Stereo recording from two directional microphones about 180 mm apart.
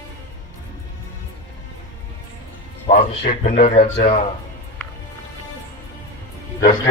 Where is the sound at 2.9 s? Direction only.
45° left (ahead or behind).